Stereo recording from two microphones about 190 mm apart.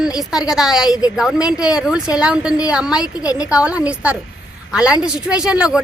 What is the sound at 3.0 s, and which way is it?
Speech, 20° left (ahead or behind).